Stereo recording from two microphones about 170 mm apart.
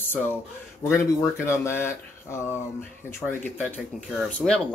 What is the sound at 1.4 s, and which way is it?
A man's voice, 15° left (ahead or behind).